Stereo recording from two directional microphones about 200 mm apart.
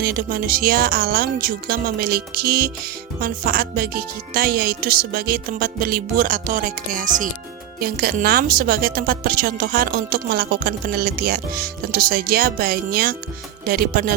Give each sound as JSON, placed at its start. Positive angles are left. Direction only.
{"t": 0.0, "sound": "speech", "side_deg": -50}